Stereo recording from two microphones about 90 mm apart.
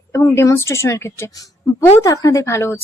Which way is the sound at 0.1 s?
30° left (ahead or behind).